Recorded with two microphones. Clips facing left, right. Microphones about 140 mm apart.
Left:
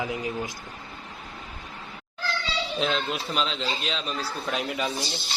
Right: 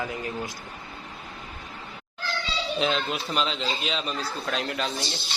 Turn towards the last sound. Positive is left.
turn(degrees=5)  # may be behind; listen again after turning